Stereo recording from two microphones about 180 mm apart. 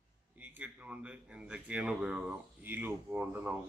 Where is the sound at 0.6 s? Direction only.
5° right (ahead or behind).